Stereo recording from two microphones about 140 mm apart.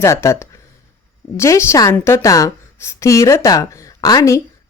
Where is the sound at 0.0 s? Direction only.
20° left (ahead or behind).